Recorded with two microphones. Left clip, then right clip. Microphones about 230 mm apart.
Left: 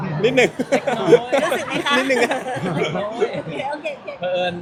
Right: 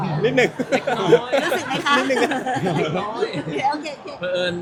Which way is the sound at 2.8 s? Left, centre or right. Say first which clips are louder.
Left 1 dB; left.